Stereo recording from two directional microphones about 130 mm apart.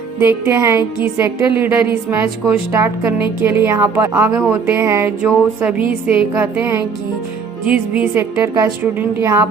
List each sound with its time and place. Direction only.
0.2 s a woman's voice: 15° right (ahead or behind)